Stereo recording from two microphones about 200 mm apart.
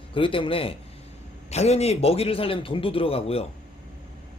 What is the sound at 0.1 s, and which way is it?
A man's voice, 25° left (ahead or behind).